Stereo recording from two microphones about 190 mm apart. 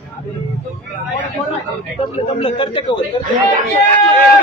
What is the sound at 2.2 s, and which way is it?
Speech, 30° left (ahead or behind).